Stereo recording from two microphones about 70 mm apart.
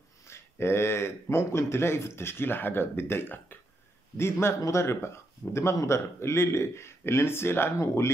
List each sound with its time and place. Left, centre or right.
0.3 s speech: left